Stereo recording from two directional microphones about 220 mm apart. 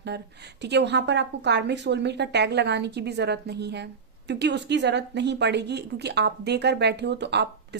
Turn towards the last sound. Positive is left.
turn(degrees=-50)  # may be behind; listen again after turning